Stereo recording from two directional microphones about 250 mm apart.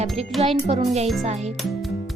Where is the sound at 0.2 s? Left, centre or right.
Right.